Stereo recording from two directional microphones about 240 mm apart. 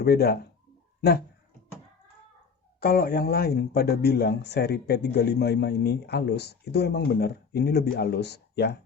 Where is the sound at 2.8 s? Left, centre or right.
Left.